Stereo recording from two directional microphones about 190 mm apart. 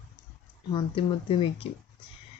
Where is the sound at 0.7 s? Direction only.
25° left (ahead or behind).